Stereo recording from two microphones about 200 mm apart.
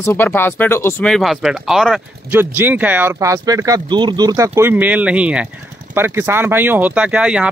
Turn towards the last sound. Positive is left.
turn(degrees=-5)  # may be behind; listen again after turning